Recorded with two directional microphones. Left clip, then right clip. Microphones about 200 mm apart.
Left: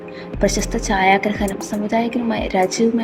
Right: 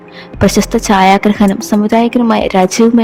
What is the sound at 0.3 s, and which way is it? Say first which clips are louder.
A woman's voice: right 8 dB; 40° right (ahead or behind).